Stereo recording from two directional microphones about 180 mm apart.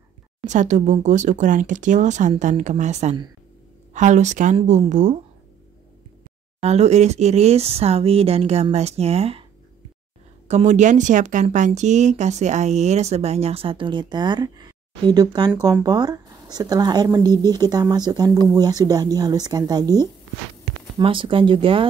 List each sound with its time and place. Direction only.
0.5 s speech: 45° right (ahead or behind)
6.6 s speech: 35° right (ahead or behind)
10.5 s speech: 40° right (ahead or behind)